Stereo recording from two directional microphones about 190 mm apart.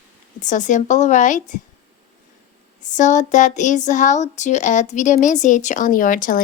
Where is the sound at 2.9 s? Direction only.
40° left (ahead or behind).